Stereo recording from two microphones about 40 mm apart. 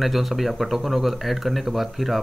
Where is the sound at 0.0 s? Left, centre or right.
Centre.